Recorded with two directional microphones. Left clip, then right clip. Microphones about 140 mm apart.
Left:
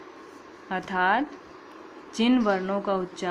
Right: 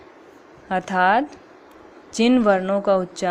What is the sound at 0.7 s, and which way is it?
Speech, 45° right (ahead or behind).